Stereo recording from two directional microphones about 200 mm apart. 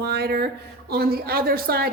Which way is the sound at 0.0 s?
55° right (ahead or behind).